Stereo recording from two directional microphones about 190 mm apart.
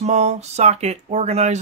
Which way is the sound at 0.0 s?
35° right (ahead or behind).